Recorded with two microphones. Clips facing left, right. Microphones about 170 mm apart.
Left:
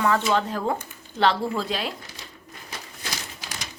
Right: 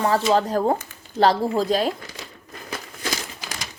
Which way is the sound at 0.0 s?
35° right (ahead or behind).